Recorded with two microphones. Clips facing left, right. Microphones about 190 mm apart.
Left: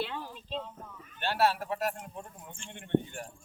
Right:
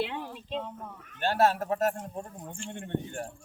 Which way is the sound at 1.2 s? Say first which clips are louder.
Right 3 dB; 45° right (ahead or behind).